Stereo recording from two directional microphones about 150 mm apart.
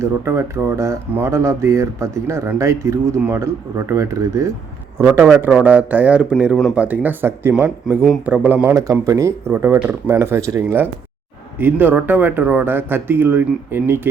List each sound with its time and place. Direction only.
0.0 s speech: 20° right (ahead or behind)